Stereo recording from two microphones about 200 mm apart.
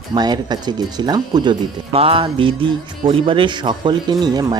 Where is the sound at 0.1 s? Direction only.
20° right (ahead or behind).